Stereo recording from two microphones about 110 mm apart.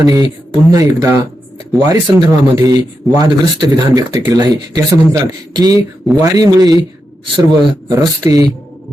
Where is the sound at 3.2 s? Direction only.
40° right (ahead or behind).